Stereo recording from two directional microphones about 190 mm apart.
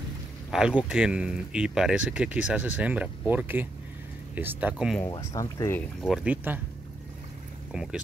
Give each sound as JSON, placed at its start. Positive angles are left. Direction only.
{"t": 0.5, "sound": "speech", "side_deg": -5}
{"t": 5.0, "sound": "speech", "side_deg": 15}
{"t": 6.0, "sound": "speech", "side_deg": -5}
{"t": 7.7, "sound": "speech", "side_deg": -5}